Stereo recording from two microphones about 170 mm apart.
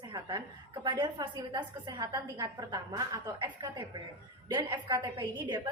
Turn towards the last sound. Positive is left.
turn(degrees=-25)  # may be behind; listen again after turning